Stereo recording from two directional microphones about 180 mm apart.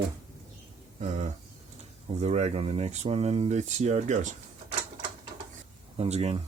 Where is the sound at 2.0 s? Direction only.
35° right (ahead or behind).